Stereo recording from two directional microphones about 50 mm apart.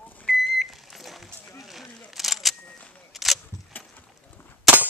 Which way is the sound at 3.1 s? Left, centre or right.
Centre.